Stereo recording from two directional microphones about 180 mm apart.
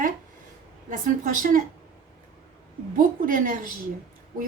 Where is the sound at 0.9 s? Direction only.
50° right (ahead or behind).